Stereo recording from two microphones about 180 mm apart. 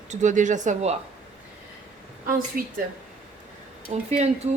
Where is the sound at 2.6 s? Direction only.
50° right (ahead or behind).